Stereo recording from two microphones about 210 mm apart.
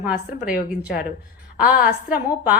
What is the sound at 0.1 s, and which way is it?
Speech, 45° left (ahead or behind).